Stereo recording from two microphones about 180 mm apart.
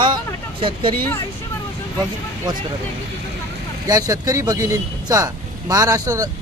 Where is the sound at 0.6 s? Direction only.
30° right (ahead or behind).